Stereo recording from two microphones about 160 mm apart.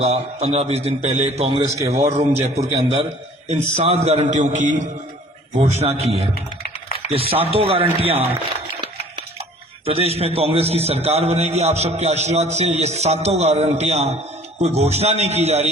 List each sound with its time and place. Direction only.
0.0 s a man's voice: 40° right (ahead or behind)
6.6 s typing: 70° left (ahead or behind)
7.1 s a man's voice: 35° right (ahead or behind)
9.8 s a man's voice: 40° right (ahead or behind)